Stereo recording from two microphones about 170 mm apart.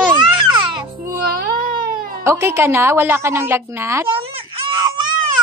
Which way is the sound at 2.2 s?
15° right (ahead or behind).